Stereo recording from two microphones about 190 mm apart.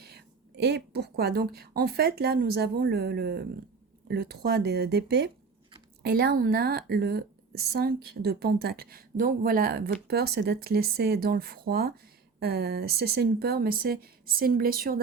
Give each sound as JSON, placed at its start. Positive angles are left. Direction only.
{"t": 0.0, "sound": "a woman's voice", "side_deg": -60}